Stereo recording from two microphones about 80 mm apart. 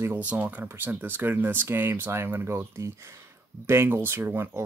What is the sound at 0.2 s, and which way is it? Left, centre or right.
Speech, centre.